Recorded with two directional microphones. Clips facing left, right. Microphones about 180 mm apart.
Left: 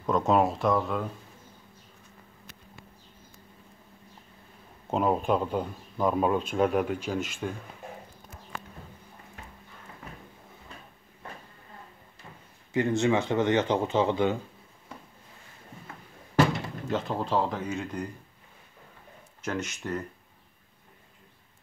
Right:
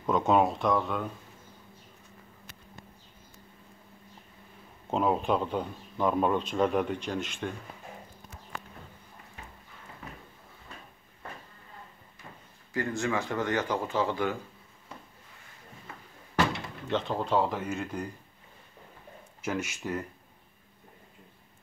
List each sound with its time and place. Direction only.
0.0 s a man's voice: centre (ahead or behind)
4.8 s a man's voice: centre (ahead or behind)
12.7 s speech: 20° left (ahead or behind)
16.9 s a man's voice: centre (ahead or behind)
19.4 s speech: 10° right (ahead or behind)